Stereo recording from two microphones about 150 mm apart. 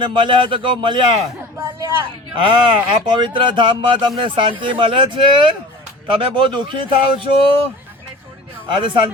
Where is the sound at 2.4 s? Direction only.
35° right (ahead or behind).